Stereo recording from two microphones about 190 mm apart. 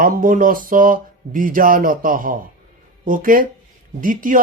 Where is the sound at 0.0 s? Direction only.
45° right (ahead or behind).